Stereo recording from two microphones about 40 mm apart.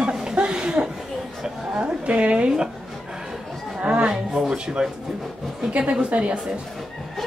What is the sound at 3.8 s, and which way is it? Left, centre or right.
Speech, right.